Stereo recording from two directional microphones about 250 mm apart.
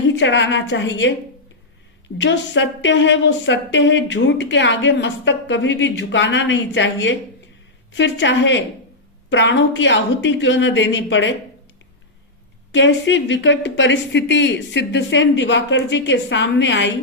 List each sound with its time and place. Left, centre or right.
0.2 s speech: left
2.2 s speech: left
12.7 s speech: left